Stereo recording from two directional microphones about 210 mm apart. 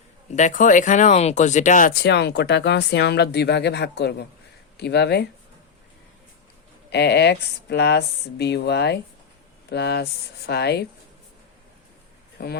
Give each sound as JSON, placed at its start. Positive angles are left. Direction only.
{"t": 0.3, "sound": "speech", "side_deg": 35}
{"t": 6.9, "sound": "speech", "side_deg": 50}
{"t": 12.4, "sound": "speech", "side_deg": 50}